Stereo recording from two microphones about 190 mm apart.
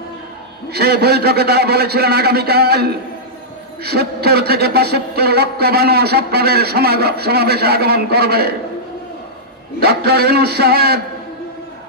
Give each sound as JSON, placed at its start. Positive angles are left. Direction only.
{"t": 0.7, "sound": "a man's voice", "side_deg": -55}
{"t": 9.8, "sound": "a man's voice", "side_deg": -55}